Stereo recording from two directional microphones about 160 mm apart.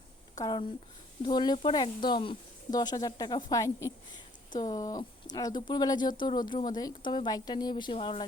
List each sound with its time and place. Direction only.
0.3 s speech: 25° left (ahead or behind)